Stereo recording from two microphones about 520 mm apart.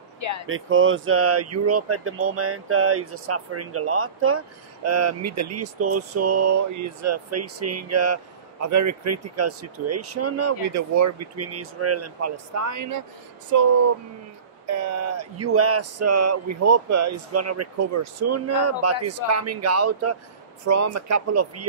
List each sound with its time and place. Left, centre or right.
0.2 s speech: left
0.5 s speech: right
14.7 s speech: right